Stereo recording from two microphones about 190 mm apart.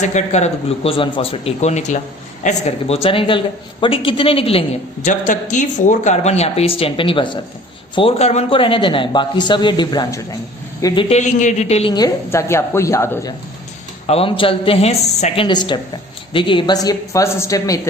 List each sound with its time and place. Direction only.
0.0 s a woman's voice: 35° left (ahead or behind)
5.0 s a woman's voice: 40° left (ahead or behind); by 11.0 s 20° left (ahead or behind)
11.1 s a woman's voice: 40° left (ahead or behind)
11.9 s a woman's voice: 15° left (ahead or behind)
14.1 s speech: 30° left (ahead or behind)